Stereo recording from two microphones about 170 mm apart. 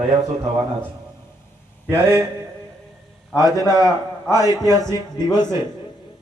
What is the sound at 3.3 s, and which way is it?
A man's voice, 20° left (ahead or behind).